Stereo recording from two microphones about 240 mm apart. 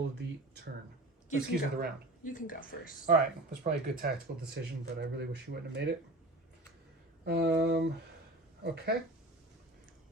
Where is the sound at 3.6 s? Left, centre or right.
Right.